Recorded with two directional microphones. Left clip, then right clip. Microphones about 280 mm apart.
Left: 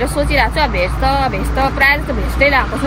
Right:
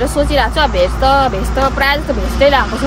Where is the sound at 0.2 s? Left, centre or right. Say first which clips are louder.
Right 2 dB; centre.